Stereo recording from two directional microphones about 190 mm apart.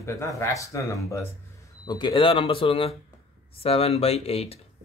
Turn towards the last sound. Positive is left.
turn(degrees=30)  # may be behind; listen again after turning